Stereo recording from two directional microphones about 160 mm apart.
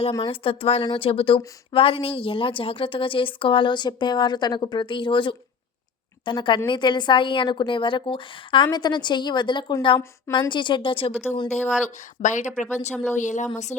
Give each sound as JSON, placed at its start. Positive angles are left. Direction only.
{"t": 0.1, "sound": "a woman's voice", "side_deg": 35}